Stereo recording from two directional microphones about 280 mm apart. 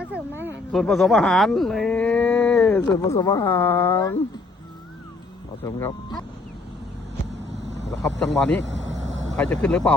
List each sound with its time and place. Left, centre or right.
0.1 s speech: centre
5.6 s speech: centre
8.2 s speech: centre
8.6 s speech: right
9.3 s speech: centre